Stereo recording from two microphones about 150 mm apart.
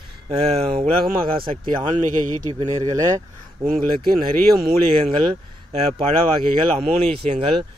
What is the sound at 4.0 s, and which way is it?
Speech, 80° right.